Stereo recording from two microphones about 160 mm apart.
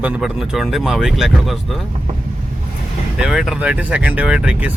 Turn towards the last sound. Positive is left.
turn(degrees=-5)  # may be behind; listen again after turning